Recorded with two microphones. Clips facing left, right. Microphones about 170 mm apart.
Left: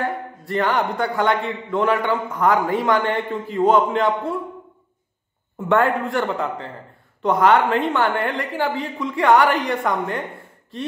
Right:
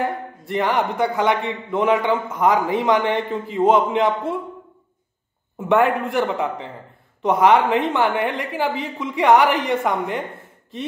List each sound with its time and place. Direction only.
0.0 s a man's voice: 20° right (ahead or behind)
5.7 s a man's voice: 20° right (ahead or behind)